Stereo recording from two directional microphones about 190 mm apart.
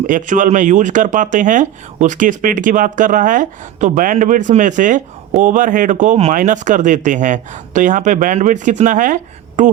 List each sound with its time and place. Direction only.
0.1 s speech: 45° right (ahead or behind)